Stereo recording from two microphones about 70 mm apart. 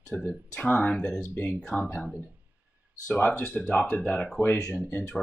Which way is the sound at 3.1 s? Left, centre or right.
Left.